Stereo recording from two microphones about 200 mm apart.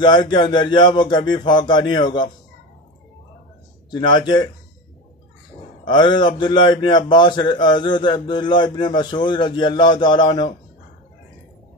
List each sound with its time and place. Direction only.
0.0 s a man's voice: 20° left (ahead or behind)
3.9 s a man's voice: 20° left (ahead or behind)
5.9 s a man's voice: 20° left (ahead or behind)